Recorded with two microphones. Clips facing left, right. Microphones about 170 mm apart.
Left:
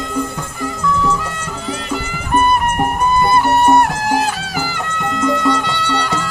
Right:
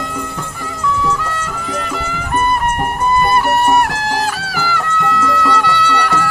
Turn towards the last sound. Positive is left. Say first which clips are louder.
# right 3 dB
turn(degrees=25)  # may be behind; listen again after turning